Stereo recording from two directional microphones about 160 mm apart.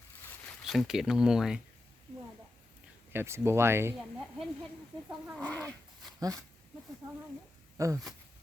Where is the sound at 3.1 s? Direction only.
15° right (ahead or behind).